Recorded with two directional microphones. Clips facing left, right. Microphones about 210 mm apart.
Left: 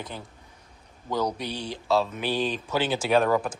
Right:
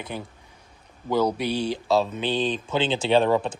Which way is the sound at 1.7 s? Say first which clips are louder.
Right 2 dB; 15° right (ahead or behind).